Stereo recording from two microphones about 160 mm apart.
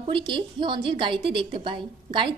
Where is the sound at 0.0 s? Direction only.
30° right (ahead or behind).